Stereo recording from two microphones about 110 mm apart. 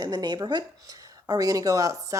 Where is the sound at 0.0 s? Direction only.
35° right (ahead or behind).